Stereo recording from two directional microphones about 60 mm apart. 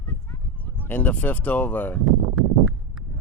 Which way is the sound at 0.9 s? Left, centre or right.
Left.